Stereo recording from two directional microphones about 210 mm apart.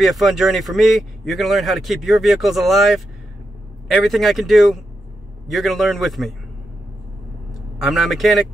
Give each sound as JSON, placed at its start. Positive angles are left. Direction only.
{"t": 0.0, "sound": "speech", "side_deg": 0}
{"t": 7.8, "sound": "speech", "side_deg": 0}